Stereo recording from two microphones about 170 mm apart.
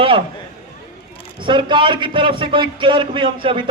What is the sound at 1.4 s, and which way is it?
A man's voice, 30° right (ahead or behind).